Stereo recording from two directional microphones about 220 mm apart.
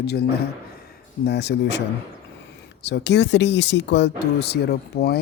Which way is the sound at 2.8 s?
50° left (ahead or behind).